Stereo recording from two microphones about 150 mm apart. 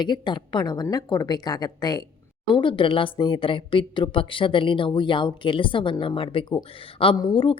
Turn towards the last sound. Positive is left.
turn(degrees=35)  # may be behind; listen again after turning